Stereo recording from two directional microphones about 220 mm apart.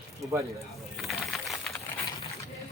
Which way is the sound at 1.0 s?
Centre (ahead or behind).